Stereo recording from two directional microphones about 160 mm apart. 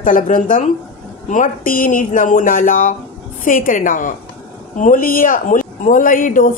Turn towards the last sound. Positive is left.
turn(degrees=55)  # may be behind; listen again after turning